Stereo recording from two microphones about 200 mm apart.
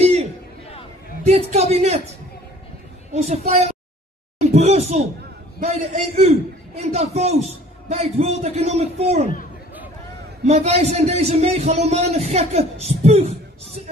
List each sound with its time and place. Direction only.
1.2 s a man's voice: 35° right (ahead or behind)
3.4 s a man's voice: 30° right (ahead or behind)
10.4 s a man's voice: 30° right (ahead or behind)